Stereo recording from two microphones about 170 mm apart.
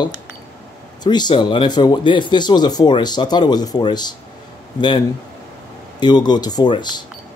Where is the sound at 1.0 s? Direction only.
25° left (ahead or behind).